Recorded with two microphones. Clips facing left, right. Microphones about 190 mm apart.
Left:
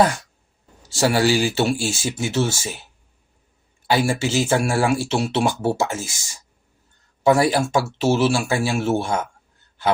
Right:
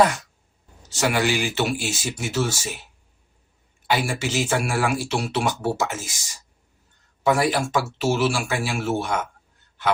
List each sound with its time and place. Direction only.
0.9 s speech: 35° left (ahead or behind)
3.8 s speech: 30° left (ahead or behind)
7.3 s speech: 30° left (ahead or behind)